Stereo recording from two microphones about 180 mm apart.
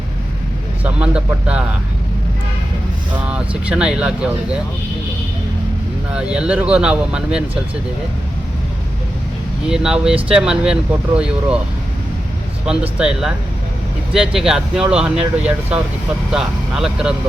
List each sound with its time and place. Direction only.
0.9 s speech: 5° right (ahead or behind)
3.2 s speech: 5° right (ahead or behind)
6.1 s speech: 5° right (ahead or behind)
9.6 s speech: 5° right (ahead or behind)
12.6 s speech: 5° right (ahead or behind)
16.3 s speech: 5° right (ahead or behind)